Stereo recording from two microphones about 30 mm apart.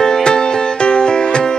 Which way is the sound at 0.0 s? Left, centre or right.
Left.